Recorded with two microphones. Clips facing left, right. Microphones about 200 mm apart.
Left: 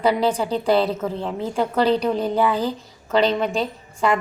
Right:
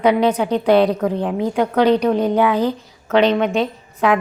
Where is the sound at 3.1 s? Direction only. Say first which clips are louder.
Right 4 dB; 65° right (ahead or behind).